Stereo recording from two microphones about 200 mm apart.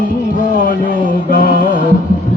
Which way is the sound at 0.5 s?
45° left (ahead or behind).